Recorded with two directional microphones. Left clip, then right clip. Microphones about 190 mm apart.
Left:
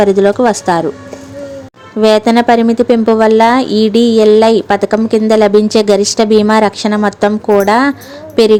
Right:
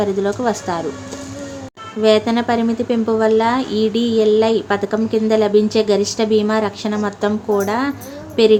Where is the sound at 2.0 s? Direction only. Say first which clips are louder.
Left 7 dB; 45° left (ahead or behind).